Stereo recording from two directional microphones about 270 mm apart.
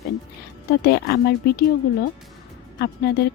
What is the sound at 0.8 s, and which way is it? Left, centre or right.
Speech, left.